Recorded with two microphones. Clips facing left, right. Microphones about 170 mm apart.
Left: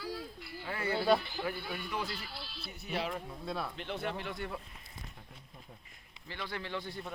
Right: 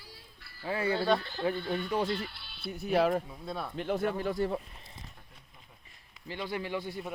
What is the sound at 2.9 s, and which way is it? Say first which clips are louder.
Speech: right 10 dB; 50° right (ahead or behind).